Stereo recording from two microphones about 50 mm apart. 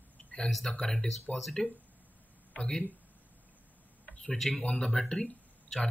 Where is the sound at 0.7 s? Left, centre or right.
Centre.